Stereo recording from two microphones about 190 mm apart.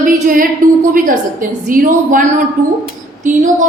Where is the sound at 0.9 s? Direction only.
45° right (ahead or behind).